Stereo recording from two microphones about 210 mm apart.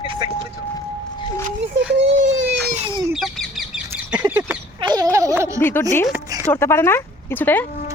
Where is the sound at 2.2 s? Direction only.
65° right (ahead or behind).